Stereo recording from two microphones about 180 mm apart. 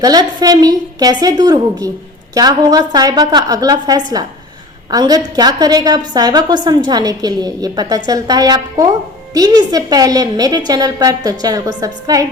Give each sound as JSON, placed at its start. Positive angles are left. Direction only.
{"t": 0.0, "sound": "a woman's voice", "side_deg": -20}